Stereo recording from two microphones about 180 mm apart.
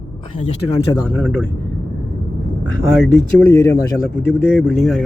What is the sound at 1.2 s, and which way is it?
Speech, centre (ahead or behind).